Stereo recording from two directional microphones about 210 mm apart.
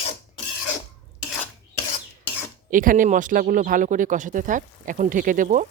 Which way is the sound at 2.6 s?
40° right (ahead or behind).